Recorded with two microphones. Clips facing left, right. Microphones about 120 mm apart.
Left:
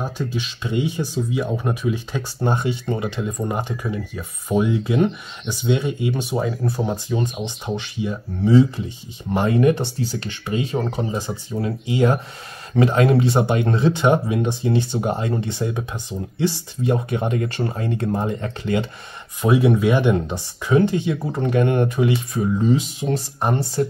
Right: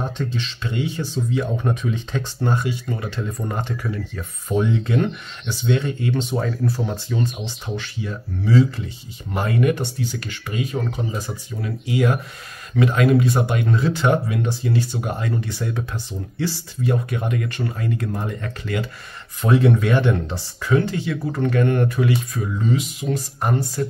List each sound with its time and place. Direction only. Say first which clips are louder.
0.0 s speech: even; 10° left (ahead or behind)
2.4 s speech: left 2 dB; 20° left (ahead or behind)
3.2 s speech: left 3 dB; 15° left (ahead or behind)
19.4 s speech: left 1 dB; 10° left (ahead or behind); by 23.9 s 30° left (ahead or behind)